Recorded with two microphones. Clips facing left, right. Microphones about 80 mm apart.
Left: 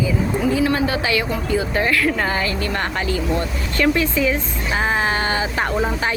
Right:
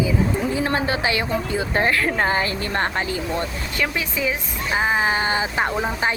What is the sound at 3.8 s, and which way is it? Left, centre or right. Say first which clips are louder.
Speech: left 7 dB; centre.